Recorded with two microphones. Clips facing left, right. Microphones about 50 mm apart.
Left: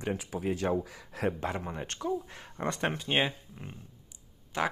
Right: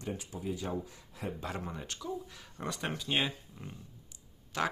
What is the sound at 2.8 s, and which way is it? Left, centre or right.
Speech, left.